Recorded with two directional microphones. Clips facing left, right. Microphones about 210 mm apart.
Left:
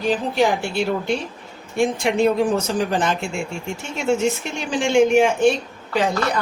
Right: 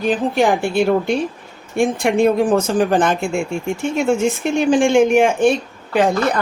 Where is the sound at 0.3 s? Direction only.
50° right (ahead or behind).